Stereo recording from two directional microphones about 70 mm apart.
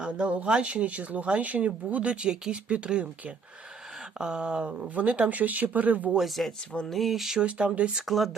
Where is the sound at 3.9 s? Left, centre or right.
Centre; by 6.2 s right.